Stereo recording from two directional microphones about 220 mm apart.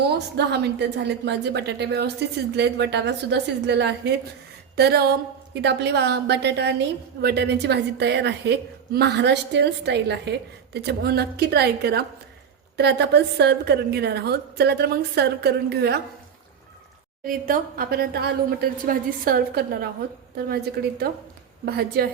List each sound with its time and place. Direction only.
0.0 s a woman's voice: 50° right (ahead or behind)
17.2 s a woman's voice: 40° right (ahead or behind)